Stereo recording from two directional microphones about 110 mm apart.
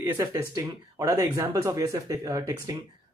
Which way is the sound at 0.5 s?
35° right (ahead or behind).